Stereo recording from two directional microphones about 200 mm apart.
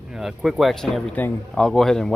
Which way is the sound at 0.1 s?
5° right (ahead or behind).